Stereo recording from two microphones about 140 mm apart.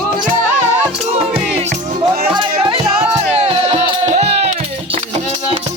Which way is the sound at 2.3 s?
30° right (ahead or behind).